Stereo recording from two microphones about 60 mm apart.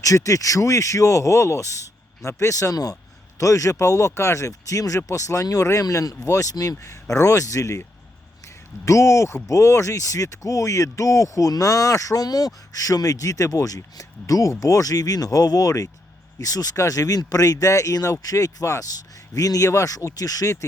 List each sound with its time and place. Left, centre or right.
0.0 s a man's voice: left
6.1 s speech: left
8.8 s speech: left
16.4 s speech: left